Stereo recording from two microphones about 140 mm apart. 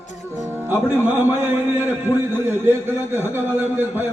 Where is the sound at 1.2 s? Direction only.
15° right (ahead or behind).